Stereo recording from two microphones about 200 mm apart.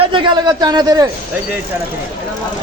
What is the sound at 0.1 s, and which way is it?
Speech, 20° right (ahead or behind).